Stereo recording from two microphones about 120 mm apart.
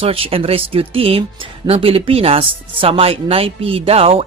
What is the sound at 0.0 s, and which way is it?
Speech, 55° right (ahead or behind).